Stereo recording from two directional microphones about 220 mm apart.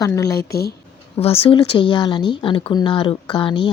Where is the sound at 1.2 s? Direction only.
25° left (ahead or behind).